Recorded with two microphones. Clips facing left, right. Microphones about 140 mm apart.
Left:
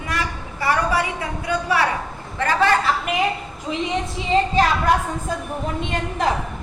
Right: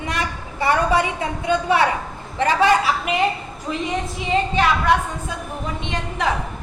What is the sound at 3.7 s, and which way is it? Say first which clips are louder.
Speech: left 1 dB; 20° left (ahead or behind).